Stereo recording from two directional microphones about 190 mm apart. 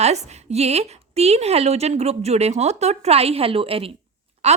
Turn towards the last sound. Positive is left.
turn(degrees=-35)  # may be behind; listen again after turning